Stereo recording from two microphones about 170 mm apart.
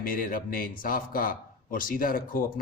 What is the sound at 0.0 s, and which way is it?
Speech, 55° left (ahead or behind).